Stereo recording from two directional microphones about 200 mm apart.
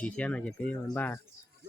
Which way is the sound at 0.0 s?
5° left (ahead or behind).